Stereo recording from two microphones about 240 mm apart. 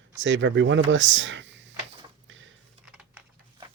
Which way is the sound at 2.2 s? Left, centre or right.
Right.